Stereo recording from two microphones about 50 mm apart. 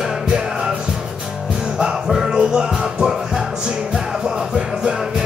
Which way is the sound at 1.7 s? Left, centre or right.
Centre.